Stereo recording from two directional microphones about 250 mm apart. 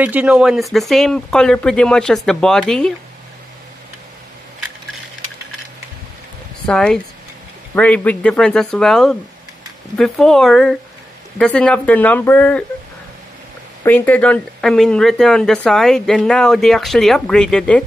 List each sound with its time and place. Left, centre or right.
0.0 s speech: centre
6.6 s speech: centre
13.8 s speech: centre